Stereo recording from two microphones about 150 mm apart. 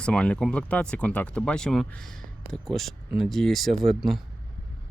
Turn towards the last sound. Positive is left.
turn(degrees=0)  # may be behind; listen again after turning